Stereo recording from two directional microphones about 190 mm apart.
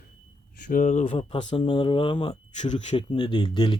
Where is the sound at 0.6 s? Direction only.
40° left (ahead or behind).